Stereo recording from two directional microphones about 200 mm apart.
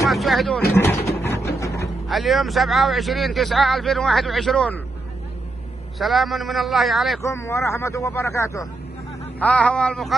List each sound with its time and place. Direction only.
0.1 s speech: centre (ahead or behind)
0.7 s vehicle: 15° left (ahead or behind)
1.6 s a sound: 15° left (ahead or behind)
2.0 s speech: centre (ahead or behind)
5.9 s speech: centre (ahead or behind)
7.2 s speech: 15° left (ahead or behind)